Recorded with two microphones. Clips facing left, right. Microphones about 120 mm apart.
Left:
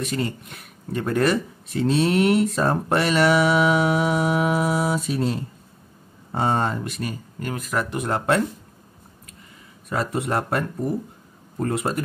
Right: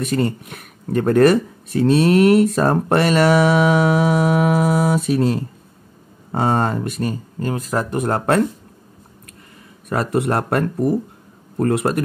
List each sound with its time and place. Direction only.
0.0 s speech: 50° right (ahead or behind); by 7.9 s 30° right (ahead or behind)
7.9 s speech: 45° right (ahead or behind)
9.8 s speech: 65° right (ahead or behind)